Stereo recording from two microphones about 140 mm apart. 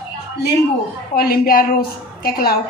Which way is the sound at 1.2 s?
90° left.